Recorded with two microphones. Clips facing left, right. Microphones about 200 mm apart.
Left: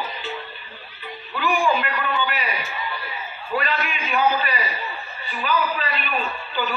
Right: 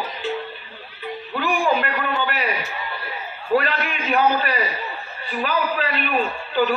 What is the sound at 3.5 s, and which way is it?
A man's voice, 60° right (ahead or behind).